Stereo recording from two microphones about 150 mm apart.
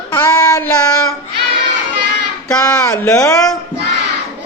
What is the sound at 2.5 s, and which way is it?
Speech, 25° left (ahead or behind).